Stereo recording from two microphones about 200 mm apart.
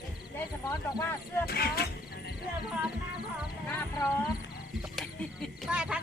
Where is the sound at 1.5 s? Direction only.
50° left (ahead or behind).